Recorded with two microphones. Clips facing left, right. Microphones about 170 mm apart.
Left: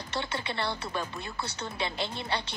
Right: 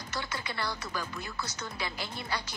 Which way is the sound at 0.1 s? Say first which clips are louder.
Left 4 dB; 30° left (ahead or behind).